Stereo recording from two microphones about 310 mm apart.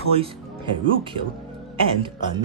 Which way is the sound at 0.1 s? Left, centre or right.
Centre.